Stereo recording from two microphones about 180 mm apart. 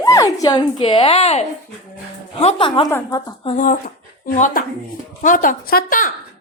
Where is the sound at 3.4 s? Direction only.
45° left (ahead or behind).